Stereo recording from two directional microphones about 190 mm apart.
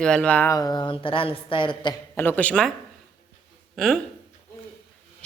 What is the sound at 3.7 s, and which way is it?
Speech, centre (ahead or behind).